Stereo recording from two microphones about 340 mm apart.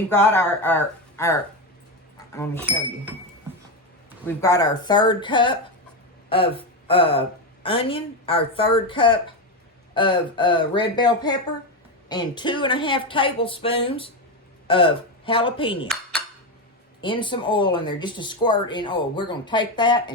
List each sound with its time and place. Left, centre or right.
0.1 s speech: centre
2.1 s a sound: centre
4.4 s a woman's voice: centre
17.0 s speech: centre